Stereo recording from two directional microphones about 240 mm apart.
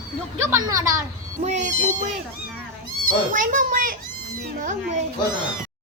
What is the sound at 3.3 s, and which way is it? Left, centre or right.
Speech, right.